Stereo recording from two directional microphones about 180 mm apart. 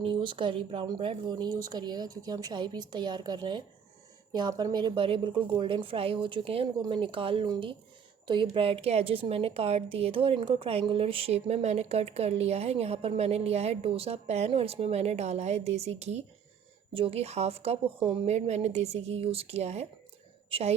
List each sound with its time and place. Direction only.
0.0 s a woman's voice: 30° right (ahead or behind)